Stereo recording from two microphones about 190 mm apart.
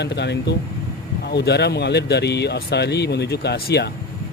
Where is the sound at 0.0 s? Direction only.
65° left (ahead or behind).